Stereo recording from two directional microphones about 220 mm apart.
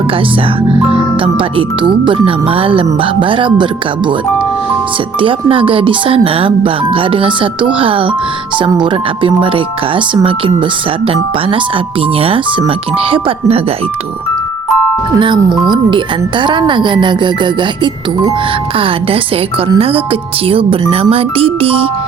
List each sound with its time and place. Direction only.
1.2 s speech: 25° right (ahead or behind)
5.2 s speech: 25° right (ahead or behind)
15.2 s speech: 20° right (ahead or behind)
18.8 s speech: 25° right (ahead or behind)